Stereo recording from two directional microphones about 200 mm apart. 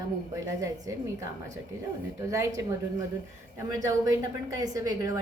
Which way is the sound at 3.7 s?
15° right (ahead or behind).